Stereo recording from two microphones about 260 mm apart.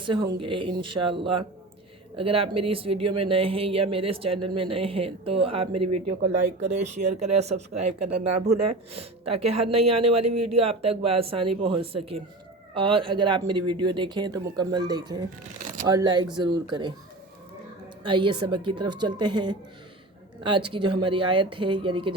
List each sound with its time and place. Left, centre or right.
0.0 s speech: centre
5.7 s speech: right
6.8 s speech: right
7.7 s speech: right
8.7 s speech: right
9.2 s speech: right
9.6 s speech: right
10.2 s speech: right
10.5 s speech: right
18.0 s speech: centre